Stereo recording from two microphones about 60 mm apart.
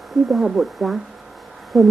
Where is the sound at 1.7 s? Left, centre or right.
Centre.